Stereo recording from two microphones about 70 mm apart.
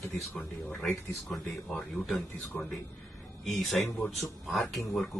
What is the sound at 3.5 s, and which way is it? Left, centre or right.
Speech, centre.